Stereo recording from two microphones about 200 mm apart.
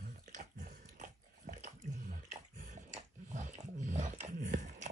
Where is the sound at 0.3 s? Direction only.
40° right (ahead or behind).